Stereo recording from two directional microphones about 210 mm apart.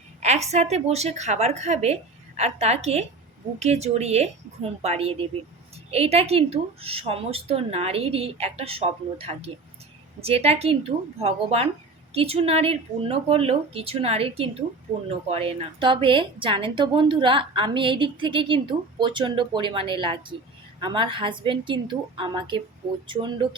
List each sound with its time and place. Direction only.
0.2 s a woman's voice: 30° right (ahead or behind)